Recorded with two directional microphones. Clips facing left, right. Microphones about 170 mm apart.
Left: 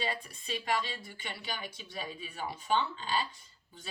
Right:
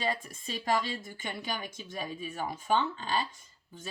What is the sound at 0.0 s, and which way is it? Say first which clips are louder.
Speech: right 4 dB; 45° right (ahead or behind).